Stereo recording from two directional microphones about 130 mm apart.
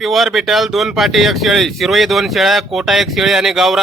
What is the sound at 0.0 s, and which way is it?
Speech, centre (ahead or behind).